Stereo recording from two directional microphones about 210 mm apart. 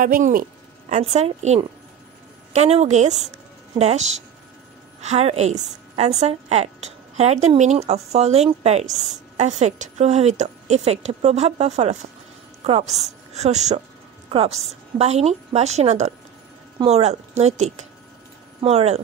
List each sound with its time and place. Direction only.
0.0 s a woman's voice: 40° right (ahead or behind)